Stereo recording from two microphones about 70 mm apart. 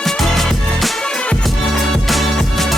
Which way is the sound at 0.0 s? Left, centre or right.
Centre.